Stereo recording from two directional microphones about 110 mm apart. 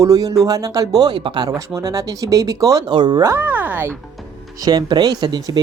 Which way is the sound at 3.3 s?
20° right (ahead or behind).